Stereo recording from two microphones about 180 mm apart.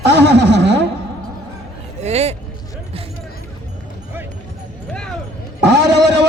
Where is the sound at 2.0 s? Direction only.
35° right (ahead or behind).